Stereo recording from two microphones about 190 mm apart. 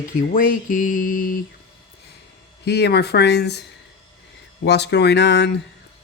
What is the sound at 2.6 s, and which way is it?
Speech, 60° left (ahead or behind).